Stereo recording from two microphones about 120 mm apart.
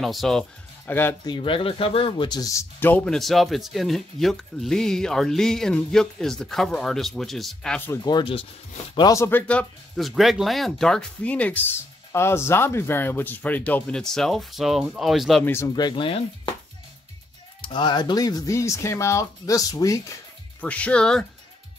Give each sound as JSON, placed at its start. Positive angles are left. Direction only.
{"t": 0.0, "sound": "speech", "side_deg": 0}
{"t": 0.8, "sound": "speech", "side_deg": 20}
{"t": 1.2, "sound": "speech", "side_deg": 45}
{"t": 2.8, "sound": "speech", "side_deg": 15}
{"t": 3.1, "sound": "speech", "side_deg": 0}
{"t": 8.0, "sound": "speech", "side_deg": 40}
{"t": 8.9, "sound": "speech", "side_deg": 30}
{"t": 9.5, "sound": "speech", "side_deg": 10}
{"t": 10.0, "sound": "speech", "side_deg": 0}
{"t": 15.4, "sound": "speech", "side_deg": 20}
{"t": 15.7, "sound": "speech", "side_deg": 40}
{"t": 17.6, "sound": "speech", "side_deg": 40}
{"t": 20.6, "sound": "speech", "side_deg": 10}